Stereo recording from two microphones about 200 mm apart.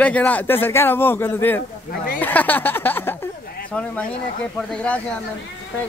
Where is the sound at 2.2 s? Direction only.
10° left (ahead or behind).